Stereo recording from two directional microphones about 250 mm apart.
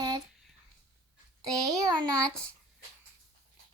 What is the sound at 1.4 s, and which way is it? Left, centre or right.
Speech, centre.